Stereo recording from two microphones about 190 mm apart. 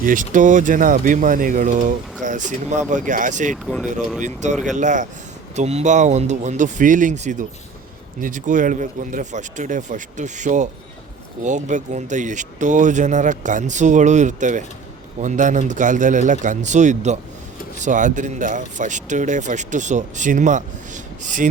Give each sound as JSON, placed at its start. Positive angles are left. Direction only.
{"t": 0.0, "sound": "speech", "side_deg": -45}
{"t": 3.5, "sound": "speech", "side_deg": 0}
{"t": 4.2, "sound": "speech", "side_deg": -40}